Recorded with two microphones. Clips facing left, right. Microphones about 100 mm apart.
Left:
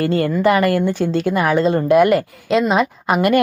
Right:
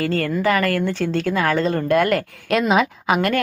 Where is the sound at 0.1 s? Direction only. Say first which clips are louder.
Left 4 dB; 20° left (ahead or behind).